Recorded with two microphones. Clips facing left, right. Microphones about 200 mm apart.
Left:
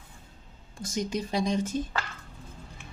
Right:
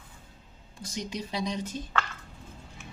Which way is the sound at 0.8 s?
45° left (ahead or behind).